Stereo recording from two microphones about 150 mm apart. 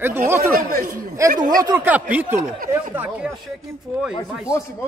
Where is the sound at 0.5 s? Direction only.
70° right (ahead or behind).